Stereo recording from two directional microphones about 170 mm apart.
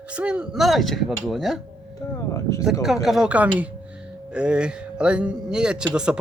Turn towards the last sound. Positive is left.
turn(degrees=-5)  # may be behind; listen again after turning